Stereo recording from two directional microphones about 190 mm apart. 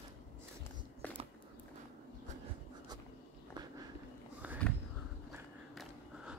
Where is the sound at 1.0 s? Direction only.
10° left (ahead or behind).